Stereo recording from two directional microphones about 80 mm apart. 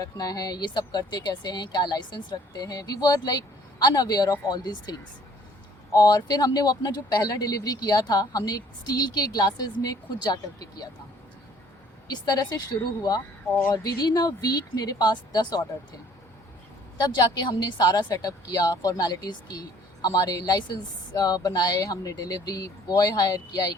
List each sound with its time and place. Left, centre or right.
0.0 s speech: left
12.0 s speech: left
17.0 s speech: left